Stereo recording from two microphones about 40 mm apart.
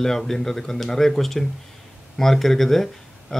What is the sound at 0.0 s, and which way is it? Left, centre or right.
A man's voice, centre.